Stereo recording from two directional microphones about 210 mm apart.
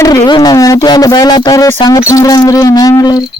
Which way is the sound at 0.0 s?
15° left (ahead or behind).